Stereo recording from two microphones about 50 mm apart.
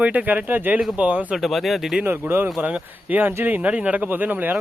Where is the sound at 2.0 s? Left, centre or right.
Right.